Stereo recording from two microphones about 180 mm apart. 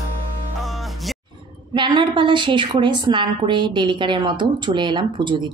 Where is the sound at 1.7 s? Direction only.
25° right (ahead or behind).